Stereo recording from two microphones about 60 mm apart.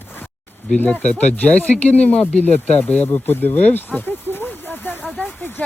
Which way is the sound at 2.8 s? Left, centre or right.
Left.